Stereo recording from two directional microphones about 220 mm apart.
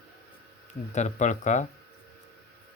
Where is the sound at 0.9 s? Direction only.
35° left (ahead or behind).